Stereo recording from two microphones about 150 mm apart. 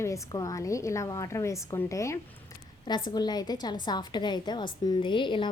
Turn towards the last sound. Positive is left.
turn(degrees=35)  # may be behind; listen again after turning